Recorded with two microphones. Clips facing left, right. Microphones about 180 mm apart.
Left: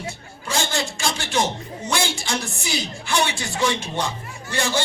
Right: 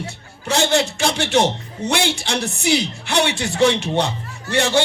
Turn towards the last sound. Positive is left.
turn(degrees=-65)  # may be behind; listen again after turning